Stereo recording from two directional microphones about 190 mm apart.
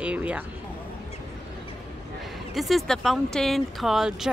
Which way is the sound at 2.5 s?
Centre (ahead or behind).